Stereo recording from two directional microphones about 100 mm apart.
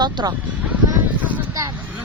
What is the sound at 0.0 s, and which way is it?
Speech, 45° right (ahead or behind).